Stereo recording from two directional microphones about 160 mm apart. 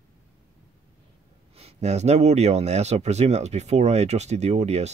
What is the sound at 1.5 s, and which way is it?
Speech, 40° right (ahead or behind).